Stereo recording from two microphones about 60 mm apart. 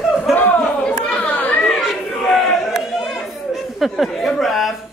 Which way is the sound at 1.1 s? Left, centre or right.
Left.